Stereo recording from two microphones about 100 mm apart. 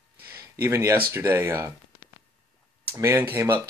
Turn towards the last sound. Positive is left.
turn(degrees=-25)  # may be behind; listen again after turning